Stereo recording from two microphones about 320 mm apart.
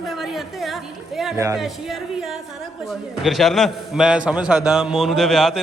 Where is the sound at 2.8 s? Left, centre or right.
Centre.